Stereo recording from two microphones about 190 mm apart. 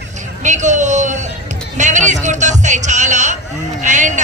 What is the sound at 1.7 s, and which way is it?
Music, 40° right (ahead or behind).